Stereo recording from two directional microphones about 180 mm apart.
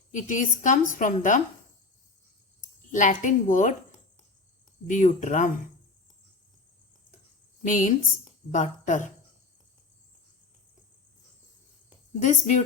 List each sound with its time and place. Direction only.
0.1 s a woman's voice: 45° left (ahead or behind)
2.9 s a woman's voice: 45° left (ahead or behind)
4.9 s a woman's voice: 45° left (ahead or behind)
7.6 s a woman's voice: 45° left (ahead or behind)
12.2 s a woman's voice: 45° left (ahead or behind)